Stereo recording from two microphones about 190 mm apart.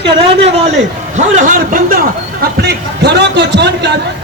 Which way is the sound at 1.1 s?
40° right (ahead or behind).